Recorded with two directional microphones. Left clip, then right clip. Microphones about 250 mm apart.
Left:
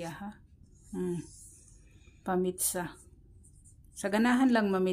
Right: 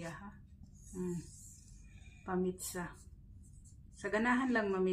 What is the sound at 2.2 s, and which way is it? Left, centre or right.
Speech, left.